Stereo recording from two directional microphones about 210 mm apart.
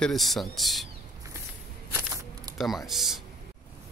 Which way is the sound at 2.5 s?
Centre (ahead or behind).